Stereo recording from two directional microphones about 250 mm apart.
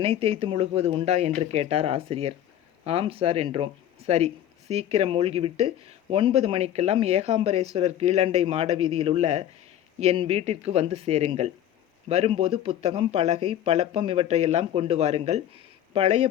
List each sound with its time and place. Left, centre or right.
0.0 s speech: right